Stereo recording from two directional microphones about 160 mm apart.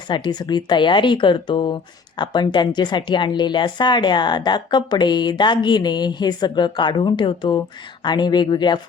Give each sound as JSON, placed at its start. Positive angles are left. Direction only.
{"t": 0.1, "sound": "speech", "side_deg": 25}